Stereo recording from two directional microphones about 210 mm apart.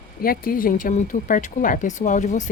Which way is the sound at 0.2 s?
45° left (ahead or behind).